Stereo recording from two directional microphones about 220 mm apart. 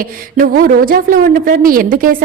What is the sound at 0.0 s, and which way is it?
A woman's voice, 40° right (ahead or behind).